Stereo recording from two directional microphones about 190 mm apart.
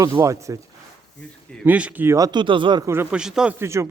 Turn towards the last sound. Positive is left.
turn(degrees=-15)  # may be behind; listen again after turning